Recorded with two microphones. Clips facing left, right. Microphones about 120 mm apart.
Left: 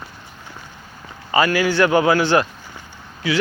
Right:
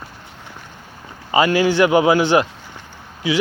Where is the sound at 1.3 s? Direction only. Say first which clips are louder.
Right 2 dB; 20° right (ahead or behind).